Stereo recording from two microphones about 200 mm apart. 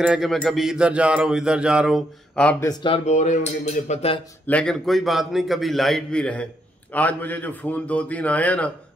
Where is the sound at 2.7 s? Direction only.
25° left (ahead or behind).